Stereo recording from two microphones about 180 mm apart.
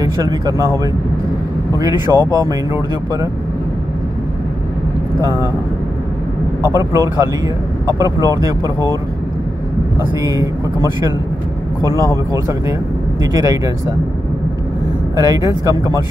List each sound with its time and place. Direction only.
0.0 s speech: 20° right (ahead or behind)
1.8 s speech: 20° right (ahead or behind)
6.7 s speech: 15° right (ahead or behind)
10.2 s speech: 20° right (ahead or behind)
12.3 s speech: 15° right (ahead or behind)
15.1 s speech: 20° right (ahead or behind)